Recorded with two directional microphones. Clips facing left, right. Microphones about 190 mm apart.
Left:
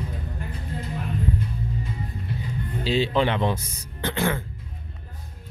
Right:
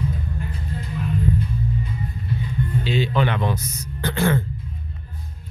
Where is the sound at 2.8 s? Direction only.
30° left (ahead or behind).